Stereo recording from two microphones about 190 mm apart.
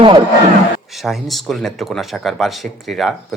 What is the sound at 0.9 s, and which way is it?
Speech, centre (ahead or behind).